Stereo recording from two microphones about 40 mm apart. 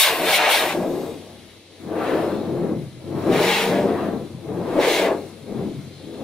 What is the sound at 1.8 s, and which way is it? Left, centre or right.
Whoosh, centre.